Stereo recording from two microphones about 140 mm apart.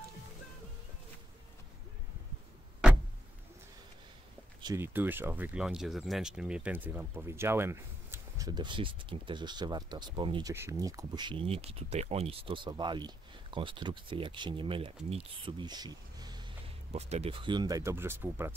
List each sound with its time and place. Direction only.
4.7 s speech: 15° right (ahead or behind); by 10.5 s 35° right (ahead or behind)
10.5 s speech: 20° right (ahead or behind)
16.9 s speech: 45° right (ahead or behind); by 18.5 s 15° right (ahead or behind)